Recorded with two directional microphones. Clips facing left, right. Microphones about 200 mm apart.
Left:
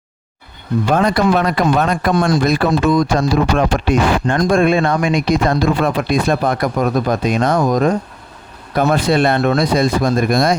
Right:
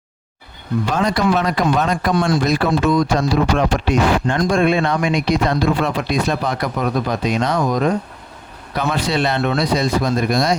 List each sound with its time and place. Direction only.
0.9 s a man's voice: 55° left (ahead or behind)